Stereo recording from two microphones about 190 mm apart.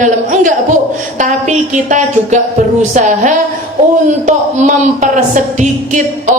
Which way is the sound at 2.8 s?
40° right (ahead or behind).